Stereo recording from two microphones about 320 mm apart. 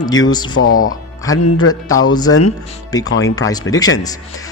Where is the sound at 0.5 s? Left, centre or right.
Left.